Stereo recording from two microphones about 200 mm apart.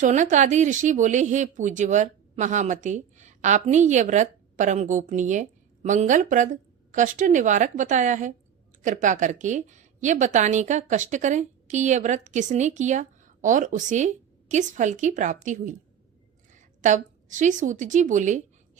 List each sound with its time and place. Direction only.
0.0 s a woman's voice: 35° right (ahead or behind)